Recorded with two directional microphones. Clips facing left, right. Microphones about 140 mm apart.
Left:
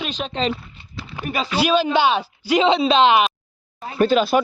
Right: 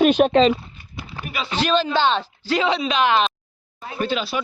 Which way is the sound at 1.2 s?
40° left (ahead or behind).